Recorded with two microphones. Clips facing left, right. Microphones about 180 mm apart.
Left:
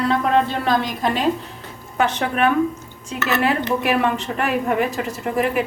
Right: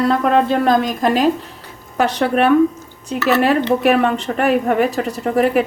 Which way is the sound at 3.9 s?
50° right (ahead or behind).